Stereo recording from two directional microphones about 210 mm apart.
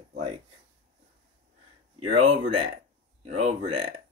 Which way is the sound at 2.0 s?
25° right (ahead or behind).